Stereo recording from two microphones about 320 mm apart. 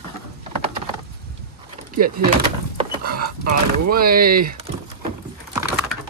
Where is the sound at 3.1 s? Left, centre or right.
Right.